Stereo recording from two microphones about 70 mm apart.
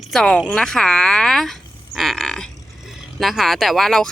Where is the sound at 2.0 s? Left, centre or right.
Centre.